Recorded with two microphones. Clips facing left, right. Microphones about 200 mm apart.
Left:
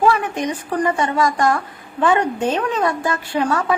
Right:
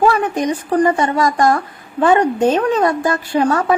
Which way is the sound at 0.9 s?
40° right (ahead or behind).